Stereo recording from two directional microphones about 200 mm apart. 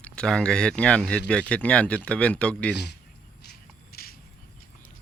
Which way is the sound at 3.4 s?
50° left (ahead or behind).